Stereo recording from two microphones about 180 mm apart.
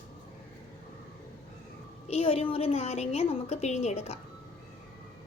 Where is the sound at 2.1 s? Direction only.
35° left (ahead or behind).